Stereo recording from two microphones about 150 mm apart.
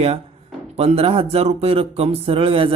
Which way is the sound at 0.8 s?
40° right (ahead or behind).